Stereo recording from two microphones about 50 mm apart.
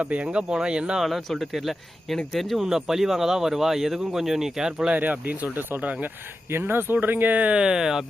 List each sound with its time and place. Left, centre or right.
0.0 s speech: right
1.0 s speech: centre
4.9 s speech: right
6.5 s speech: right
7.5 s speech: centre